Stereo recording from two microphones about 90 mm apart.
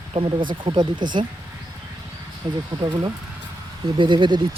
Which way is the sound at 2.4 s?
80° right.